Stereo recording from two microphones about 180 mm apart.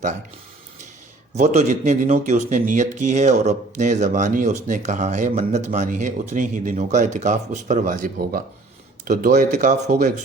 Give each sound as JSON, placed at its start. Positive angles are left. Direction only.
{"t": 1.4, "sound": "speech", "side_deg": -40}